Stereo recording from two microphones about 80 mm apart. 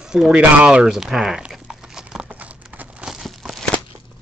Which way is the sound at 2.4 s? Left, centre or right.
Centre.